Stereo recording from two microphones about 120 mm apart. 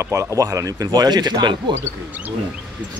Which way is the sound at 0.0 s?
25° right (ahead or behind).